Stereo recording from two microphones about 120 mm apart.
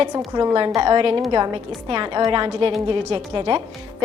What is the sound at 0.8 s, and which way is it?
Speech, 50° right (ahead or behind).